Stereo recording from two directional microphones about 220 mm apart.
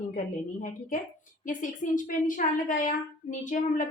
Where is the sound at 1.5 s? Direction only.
35° left (ahead or behind).